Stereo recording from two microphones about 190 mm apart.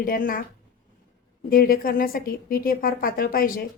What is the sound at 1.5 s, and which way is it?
A woman's voice, 50° left (ahead or behind).